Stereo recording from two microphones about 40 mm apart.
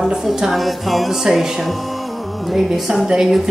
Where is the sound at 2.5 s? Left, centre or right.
Centre.